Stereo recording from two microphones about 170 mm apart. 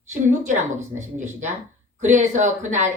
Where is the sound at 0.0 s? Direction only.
45° right (ahead or behind).